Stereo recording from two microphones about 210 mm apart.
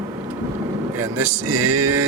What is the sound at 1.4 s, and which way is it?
Music, 90° right.